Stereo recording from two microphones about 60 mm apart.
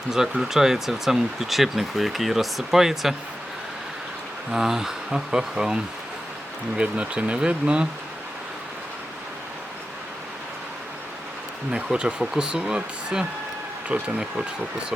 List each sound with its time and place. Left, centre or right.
0.1 s speech: centre
4.5 s speech: centre
11.7 s speech: centre
13.9 s speech: right